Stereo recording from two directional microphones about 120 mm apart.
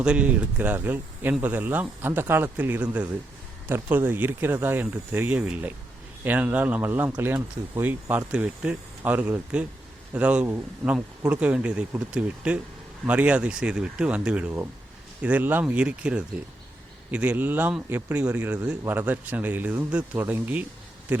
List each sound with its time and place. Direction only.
0.0 s speech: 10° right (ahead or behind)